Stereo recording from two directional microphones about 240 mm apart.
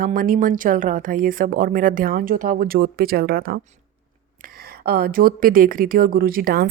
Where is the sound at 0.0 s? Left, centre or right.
Right.